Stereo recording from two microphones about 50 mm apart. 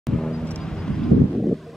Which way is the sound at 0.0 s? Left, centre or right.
Centre.